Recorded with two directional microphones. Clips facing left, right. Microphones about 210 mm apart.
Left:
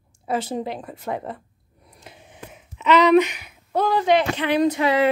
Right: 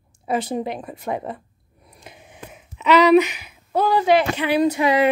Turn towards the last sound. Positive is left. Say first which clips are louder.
# right 1 dB
turn(degrees=-15)  # may be behind; listen again after turning